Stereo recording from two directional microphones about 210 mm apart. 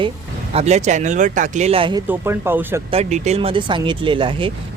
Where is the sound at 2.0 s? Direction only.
10° right (ahead or behind).